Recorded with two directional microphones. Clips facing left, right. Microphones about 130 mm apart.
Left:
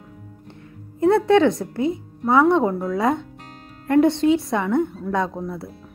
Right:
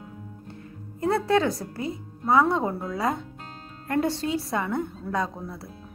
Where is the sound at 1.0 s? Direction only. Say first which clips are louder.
Left 7 dB; centre (ahead or behind).